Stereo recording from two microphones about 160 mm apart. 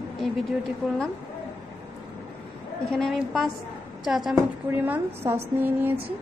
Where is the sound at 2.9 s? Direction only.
Centre (ahead or behind).